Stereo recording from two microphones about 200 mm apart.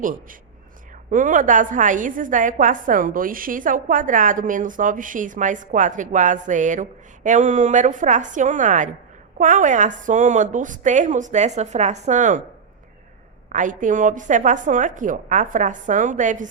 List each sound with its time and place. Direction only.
0.0 s a woman's voice: 40° right (ahead or behind)
13.5 s a woman's voice: 40° right (ahead or behind)